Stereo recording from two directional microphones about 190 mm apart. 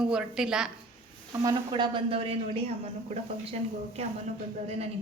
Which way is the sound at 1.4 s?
25° right (ahead or behind).